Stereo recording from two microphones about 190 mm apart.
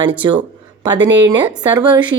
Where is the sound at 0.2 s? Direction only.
25° right (ahead or behind).